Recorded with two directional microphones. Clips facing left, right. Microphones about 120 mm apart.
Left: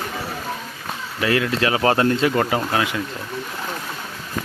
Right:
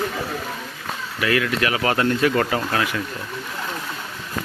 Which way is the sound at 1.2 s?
30° left (ahead or behind).